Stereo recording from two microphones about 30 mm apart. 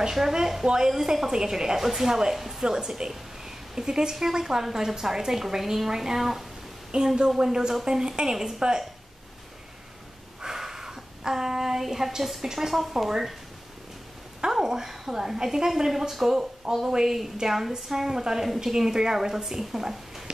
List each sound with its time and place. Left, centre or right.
0.1 s a woman's voice: centre
6.9 s speech: right
7.2 s speech: centre
10.4 s a sound: centre
11.8 s a woman's voice: centre
14.5 s a woman's voice: centre